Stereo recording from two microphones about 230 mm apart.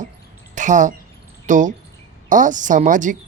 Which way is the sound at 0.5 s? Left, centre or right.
Right.